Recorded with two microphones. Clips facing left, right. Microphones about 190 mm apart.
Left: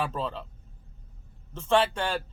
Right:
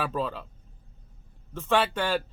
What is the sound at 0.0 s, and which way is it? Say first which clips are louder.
Speech: right 1 dB; 25° left (ahead or behind).